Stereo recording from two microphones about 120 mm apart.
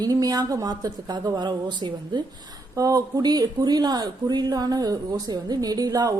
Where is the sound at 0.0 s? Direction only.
30° right (ahead or behind).